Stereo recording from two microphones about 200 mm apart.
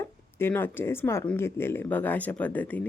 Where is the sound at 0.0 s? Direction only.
10° left (ahead or behind).